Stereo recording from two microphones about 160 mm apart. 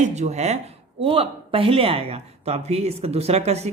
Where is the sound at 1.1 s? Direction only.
35° right (ahead or behind).